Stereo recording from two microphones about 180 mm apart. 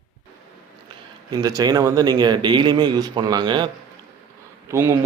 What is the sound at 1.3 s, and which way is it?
Speech, 20° right (ahead or behind).